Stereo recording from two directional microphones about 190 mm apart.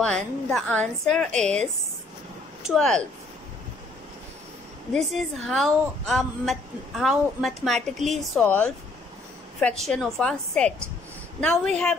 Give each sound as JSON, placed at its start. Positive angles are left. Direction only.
{"t": 0.0, "sound": "a woman's voice", "side_deg": 0}
{"t": 2.6, "sound": "speech", "side_deg": 0}
{"t": 4.9, "sound": "a woman's voice", "side_deg": 0}